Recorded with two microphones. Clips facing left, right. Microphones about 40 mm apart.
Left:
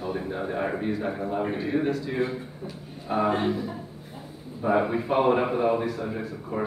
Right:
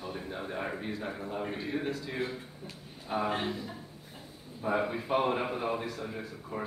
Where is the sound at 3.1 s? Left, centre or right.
Left.